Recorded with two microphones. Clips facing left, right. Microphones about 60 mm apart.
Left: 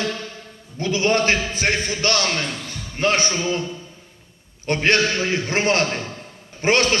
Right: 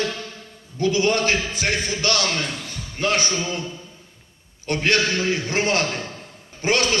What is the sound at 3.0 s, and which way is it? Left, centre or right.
Speech, left.